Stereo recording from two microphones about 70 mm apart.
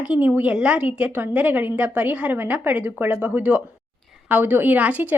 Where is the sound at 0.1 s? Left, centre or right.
Right.